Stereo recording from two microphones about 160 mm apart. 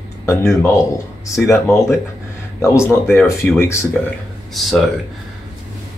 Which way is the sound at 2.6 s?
15° left (ahead or behind).